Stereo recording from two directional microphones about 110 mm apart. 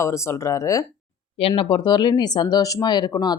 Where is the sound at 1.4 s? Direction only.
55° left (ahead or behind).